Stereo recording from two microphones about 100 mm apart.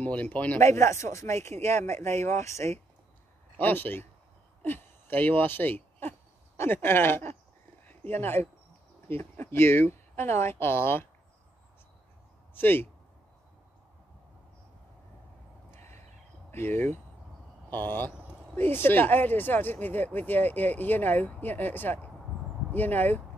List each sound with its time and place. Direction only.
0.0 s speech: 15° left (ahead or behind)
0.6 s speech: 30° left (ahead or behind)
3.5 s speech: 20° left (ahead or behind)
12.5 s speech: 20° left (ahead or behind)
16.4 s speech: 20° left (ahead or behind)